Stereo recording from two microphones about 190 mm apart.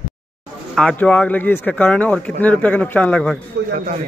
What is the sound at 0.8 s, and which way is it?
A man's voice, 5° left (ahead or behind).